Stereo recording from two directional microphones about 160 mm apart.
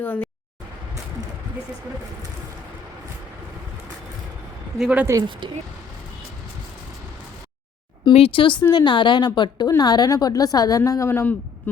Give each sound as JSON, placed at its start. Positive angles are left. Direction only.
{"t": 0.0, "sound": "speech", "side_deg": 10}
{"t": 4.8, "sound": "speech", "side_deg": -10}
{"t": 5.1, "sound": "speech", "side_deg": -30}
{"t": 8.0, "sound": "a woman's voice", "side_deg": 35}